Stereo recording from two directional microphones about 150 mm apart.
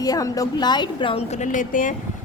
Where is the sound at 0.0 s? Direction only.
25° left (ahead or behind).